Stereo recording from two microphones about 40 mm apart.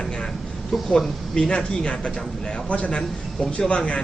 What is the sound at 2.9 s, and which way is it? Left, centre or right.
A man's voice, centre.